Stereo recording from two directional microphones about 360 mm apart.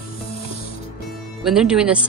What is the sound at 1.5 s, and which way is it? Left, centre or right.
Speech, centre.